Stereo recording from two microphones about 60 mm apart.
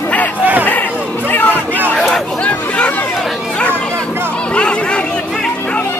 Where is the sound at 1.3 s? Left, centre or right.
Left.